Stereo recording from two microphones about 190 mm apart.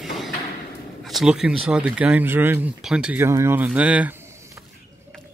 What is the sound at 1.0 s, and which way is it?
Speech, centre (ahead or behind).